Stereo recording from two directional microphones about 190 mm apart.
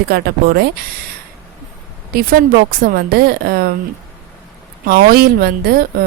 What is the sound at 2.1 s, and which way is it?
Speech, 50° right (ahead or behind).